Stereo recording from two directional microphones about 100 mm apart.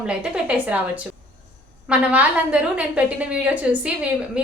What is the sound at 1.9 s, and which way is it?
A woman's voice, 10° right (ahead or behind).